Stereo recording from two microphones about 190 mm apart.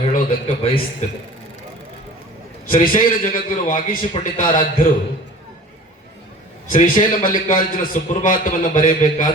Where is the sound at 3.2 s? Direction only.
45° left (ahead or behind).